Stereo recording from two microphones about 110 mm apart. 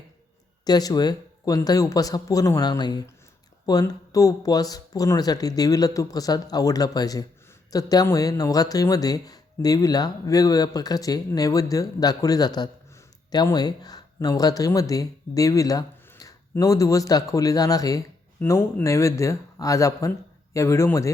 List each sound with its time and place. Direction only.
0.6 s speech: 35° left (ahead or behind)
18.3 s speech: 25° left (ahead or behind)